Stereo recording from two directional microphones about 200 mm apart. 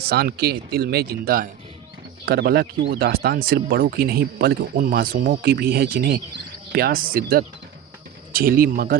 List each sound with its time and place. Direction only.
0.0 s speech: 50° right (ahead or behind)